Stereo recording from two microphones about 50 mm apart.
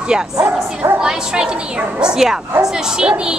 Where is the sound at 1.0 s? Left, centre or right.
Centre.